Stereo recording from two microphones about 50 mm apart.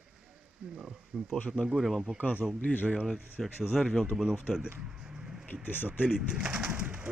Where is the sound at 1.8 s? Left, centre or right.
Centre.